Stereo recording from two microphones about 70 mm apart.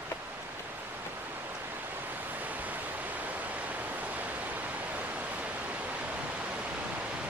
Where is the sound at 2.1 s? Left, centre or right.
Right.